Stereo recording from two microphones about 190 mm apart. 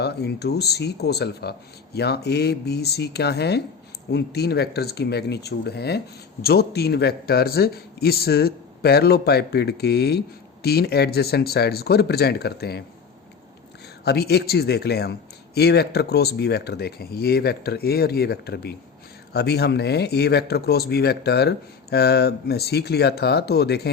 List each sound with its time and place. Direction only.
0.0 s a man's voice: 60° left (ahead or behind)
14.0 s a man's voice: 60° left (ahead or behind)